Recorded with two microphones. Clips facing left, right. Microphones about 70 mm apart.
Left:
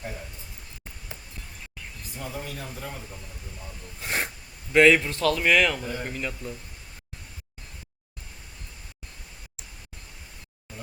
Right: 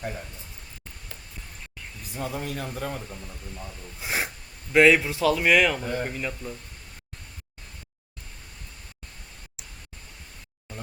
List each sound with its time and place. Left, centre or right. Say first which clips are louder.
2.1 s speech: right 5 dB; right
4.0 s speech: even; centre